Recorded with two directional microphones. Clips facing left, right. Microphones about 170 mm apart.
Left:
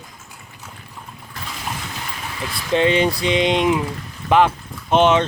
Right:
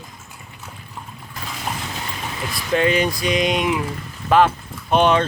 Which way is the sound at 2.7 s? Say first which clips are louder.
Left 2 dB; 25° left (ahead or behind).